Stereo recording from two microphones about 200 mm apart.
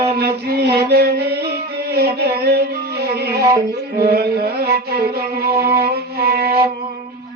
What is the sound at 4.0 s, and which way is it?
Music, 50° right (ahead or behind).